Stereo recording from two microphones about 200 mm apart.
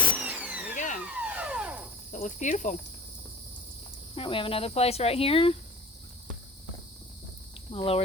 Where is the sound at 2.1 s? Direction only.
40° left (ahead or behind).